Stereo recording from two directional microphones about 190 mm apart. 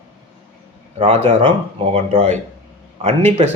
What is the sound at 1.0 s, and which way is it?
A man's voice, 30° right (ahead or behind).